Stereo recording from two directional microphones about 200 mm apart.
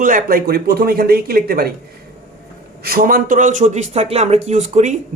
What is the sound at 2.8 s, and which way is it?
Speech, 45° right (ahead or behind).